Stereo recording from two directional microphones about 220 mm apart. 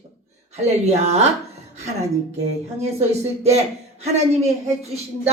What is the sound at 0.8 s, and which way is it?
Speech, 30° right (ahead or behind).